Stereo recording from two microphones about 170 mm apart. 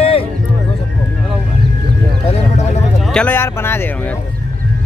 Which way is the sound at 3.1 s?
10° left (ahead or behind).